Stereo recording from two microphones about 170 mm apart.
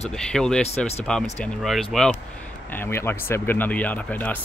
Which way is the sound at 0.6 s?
40° left (ahead or behind).